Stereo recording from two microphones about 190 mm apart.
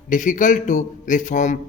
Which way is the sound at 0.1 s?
40° left (ahead or behind).